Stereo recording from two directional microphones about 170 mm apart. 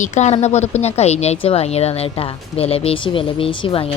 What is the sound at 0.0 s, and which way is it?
A woman's voice, 40° left (ahead or behind).